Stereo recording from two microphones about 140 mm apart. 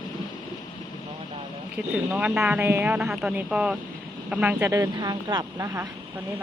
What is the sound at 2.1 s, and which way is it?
Speech, 5° right (ahead or behind).